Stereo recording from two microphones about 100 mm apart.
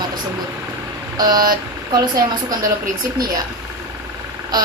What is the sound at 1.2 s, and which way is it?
A woman's voice, 40° right (ahead or behind).